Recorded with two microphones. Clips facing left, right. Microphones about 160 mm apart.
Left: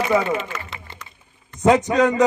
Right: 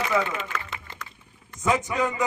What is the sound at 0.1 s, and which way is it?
Speech, 35° left (ahead or behind).